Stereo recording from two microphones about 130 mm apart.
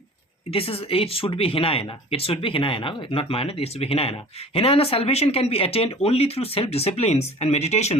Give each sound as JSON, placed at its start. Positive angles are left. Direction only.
{"t": 0.5, "sound": "speech", "side_deg": 45}